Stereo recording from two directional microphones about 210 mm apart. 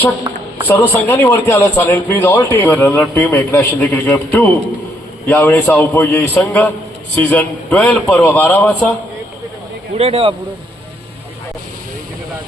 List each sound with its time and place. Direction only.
0.7 s speech: 10° left (ahead or behind)
10.0 s speech: 30° right (ahead or behind)